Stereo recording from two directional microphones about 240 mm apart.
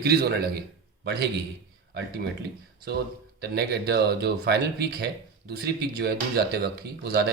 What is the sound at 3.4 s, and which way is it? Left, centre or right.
Speech, right.